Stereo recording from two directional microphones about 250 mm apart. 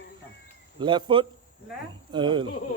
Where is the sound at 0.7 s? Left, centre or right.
Centre.